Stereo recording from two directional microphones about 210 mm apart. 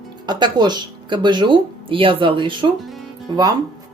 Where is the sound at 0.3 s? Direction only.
20° right (ahead or behind).